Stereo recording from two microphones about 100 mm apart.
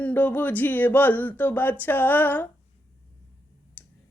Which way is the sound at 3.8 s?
20° left (ahead or behind).